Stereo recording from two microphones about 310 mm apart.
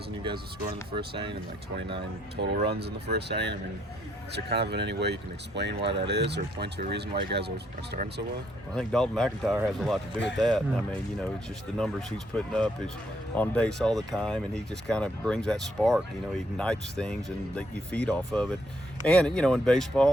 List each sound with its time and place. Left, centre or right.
0.2 s speech: centre
1.9 s speech: right
8.7 s speech: centre
11.8 s speech: centre